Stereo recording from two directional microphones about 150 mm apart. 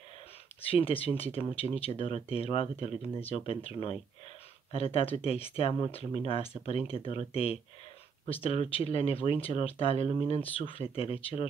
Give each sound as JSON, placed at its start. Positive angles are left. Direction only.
{"t": 0.6, "sound": "speech", "side_deg": 40}